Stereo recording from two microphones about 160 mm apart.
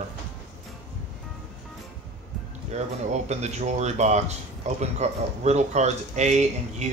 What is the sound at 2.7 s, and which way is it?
Speech, 45° right (ahead or behind).